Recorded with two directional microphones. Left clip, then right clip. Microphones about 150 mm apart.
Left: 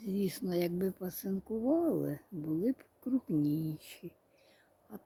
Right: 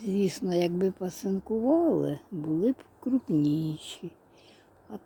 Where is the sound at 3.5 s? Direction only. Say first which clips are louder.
Right 6 dB; 15° left (ahead or behind).